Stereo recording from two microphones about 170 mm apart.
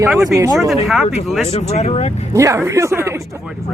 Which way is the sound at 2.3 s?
15° right (ahead or behind).